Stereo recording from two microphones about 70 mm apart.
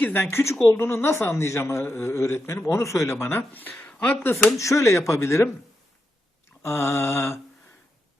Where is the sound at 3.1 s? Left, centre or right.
Left.